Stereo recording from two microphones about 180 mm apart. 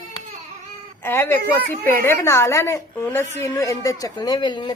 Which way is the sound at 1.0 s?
10° left (ahead or behind).